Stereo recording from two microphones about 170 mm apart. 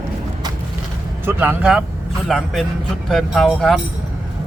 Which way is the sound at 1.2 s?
15° right (ahead or behind).